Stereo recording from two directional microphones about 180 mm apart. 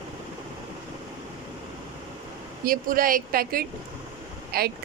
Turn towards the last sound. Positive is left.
turn(degrees=-55)  # may be behind; listen again after turning